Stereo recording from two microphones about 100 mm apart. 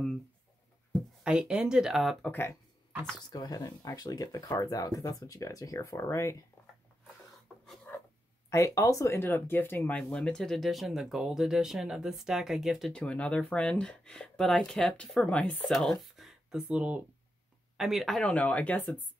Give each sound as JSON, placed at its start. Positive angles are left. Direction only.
{"t": 1.2, "sound": "speech", "side_deg": -10}
{"t": 3.2, "sound": "speech", "side_deg": 45}
{"t": 8.5, "sound": "speech", "side_deg": 30}
{"t": 12.9, "sound": "speech", "side_deg": 10}
{"t": 18.2, "sound": "speech", "side_deg": 15}